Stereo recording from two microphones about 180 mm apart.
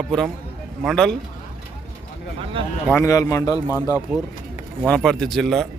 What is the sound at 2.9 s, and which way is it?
Speech, 20° left (ahead or behind).